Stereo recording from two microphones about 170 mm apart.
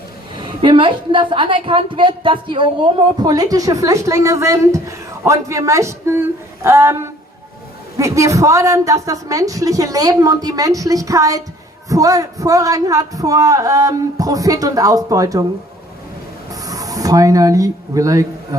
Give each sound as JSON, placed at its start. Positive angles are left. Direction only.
{"t": 0.3, "sound": "a woman's voice", "side_deg": -30}
{"t": 16.5, "sound": "speech", "side_deg": -20}